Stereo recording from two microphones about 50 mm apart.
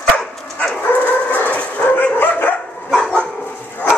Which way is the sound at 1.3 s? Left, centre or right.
Left.